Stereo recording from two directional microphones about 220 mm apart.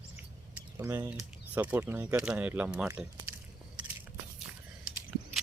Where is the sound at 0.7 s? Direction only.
10° right (ahead or behind).